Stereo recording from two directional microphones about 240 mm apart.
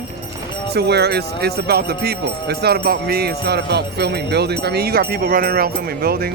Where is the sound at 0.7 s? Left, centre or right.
Right.